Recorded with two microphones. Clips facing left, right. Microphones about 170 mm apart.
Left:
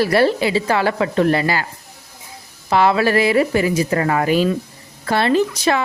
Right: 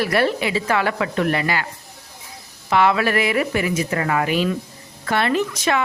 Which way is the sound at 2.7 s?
35° left (ahead or behind).